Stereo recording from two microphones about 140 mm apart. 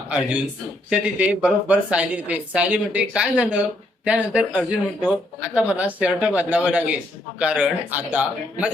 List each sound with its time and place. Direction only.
0.9 s speech: 10° right (ahead or behind)